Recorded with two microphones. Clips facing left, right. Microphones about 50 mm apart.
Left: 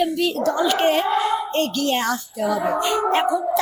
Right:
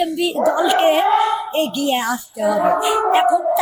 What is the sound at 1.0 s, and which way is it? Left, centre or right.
Speech, right.